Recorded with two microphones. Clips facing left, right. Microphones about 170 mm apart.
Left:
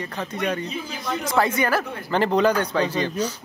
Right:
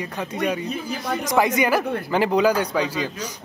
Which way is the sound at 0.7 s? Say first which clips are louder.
Right 3 dB; 60° right (ahead or behind).